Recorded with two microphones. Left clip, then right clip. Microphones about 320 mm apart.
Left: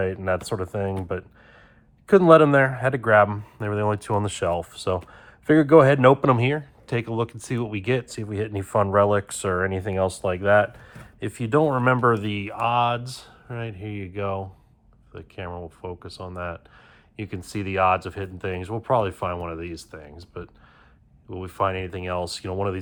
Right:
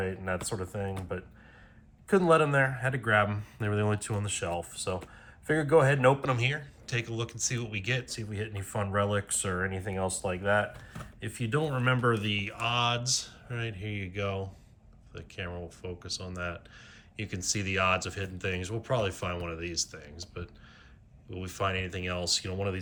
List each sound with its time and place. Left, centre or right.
0.0 s speech: centre
2.0 s speech: centre